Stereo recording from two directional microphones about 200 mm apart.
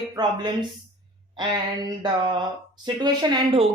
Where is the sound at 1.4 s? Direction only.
20° right (ahead or behind).